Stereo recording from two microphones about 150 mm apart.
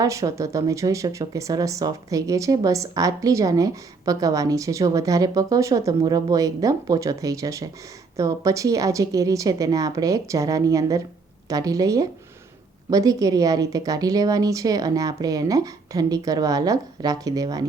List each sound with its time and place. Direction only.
0.0 s speech: 20° right (ahead or behind)